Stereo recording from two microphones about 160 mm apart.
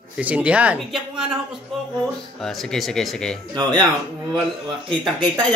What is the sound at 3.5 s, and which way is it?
Speech, 25° right (ahead or behind).